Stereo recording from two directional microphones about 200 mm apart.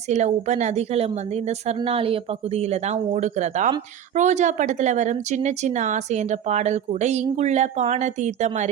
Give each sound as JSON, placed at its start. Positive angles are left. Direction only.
{"t": 0.1, "sound": "a woman's voice", "side_deg": -35}